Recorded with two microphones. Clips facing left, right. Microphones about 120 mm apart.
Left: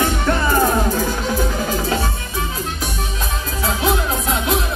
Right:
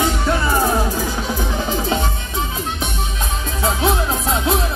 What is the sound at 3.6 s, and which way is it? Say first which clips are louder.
Music: right 1 dB; 30° right (ahead or behind).